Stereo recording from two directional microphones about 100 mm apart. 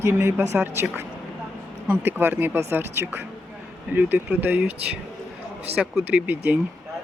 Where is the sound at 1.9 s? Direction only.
20° right (ahead or behind).